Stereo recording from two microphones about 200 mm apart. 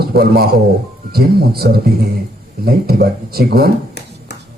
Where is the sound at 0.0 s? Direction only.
50° right (ahead or behind).